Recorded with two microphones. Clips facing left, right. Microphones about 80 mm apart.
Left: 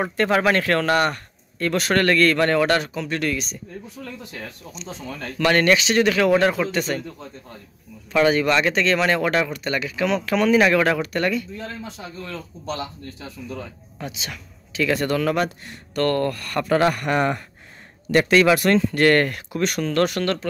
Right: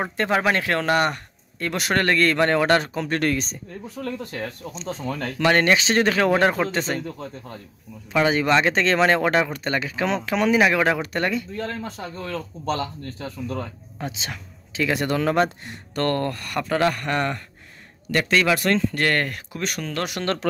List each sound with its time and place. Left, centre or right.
0.0 s a man's voice: centre; by 4.0 s right
4.0 s speech: right
4.6 s speech: right
5.0 s speech: centre
5.4 s a man's voice: right
8.1 s a man's voice: centre
11.7 s speech: right
12.3 s speech: right
13.9 s a man's voice: right
16.6 s speech: centre